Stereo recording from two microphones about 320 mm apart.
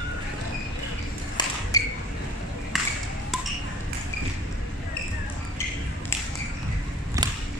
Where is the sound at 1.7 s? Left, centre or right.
Centre.